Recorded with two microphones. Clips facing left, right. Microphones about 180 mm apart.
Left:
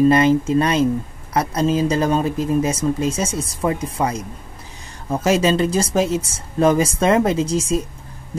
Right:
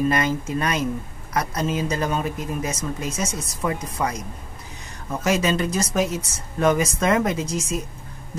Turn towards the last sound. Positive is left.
turn(degrees=30)  # may be behind; listen again after turning